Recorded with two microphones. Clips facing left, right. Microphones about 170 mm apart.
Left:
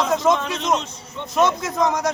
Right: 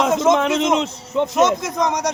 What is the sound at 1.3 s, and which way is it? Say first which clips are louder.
Speech: left 1 dB; 20° right (ahead or behind).